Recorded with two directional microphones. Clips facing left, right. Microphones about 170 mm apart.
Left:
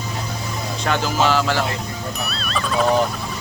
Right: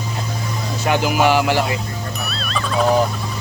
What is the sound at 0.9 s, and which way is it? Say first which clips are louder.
Speech: right 3 dB; 15° right (ahead or behind).